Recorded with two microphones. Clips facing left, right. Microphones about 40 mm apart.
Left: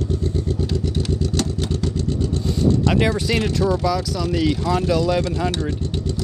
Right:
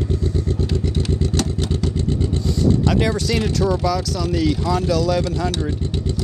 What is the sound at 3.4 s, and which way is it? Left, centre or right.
Speech, centre.